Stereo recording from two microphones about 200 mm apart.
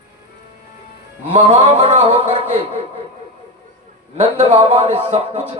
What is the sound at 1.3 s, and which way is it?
A man's voice, 30° right (ahead or behind).